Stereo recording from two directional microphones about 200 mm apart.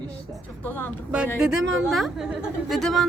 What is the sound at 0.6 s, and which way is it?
Speech, 10° left (ahead or behind).